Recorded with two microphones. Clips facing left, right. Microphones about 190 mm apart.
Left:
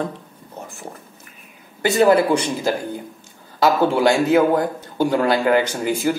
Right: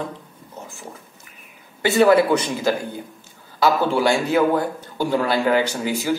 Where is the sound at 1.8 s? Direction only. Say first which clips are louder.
Even; 35° left (ahead or behind).